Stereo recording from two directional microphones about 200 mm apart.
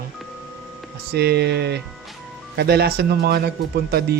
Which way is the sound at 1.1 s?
55° right (ahead or behind).